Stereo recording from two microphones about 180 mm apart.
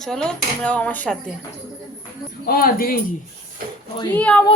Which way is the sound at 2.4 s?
55° left (ahead or behind).